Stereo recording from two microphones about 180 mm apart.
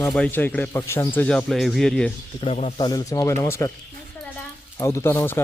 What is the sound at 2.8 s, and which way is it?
Speech, 20° left (ahead or behind).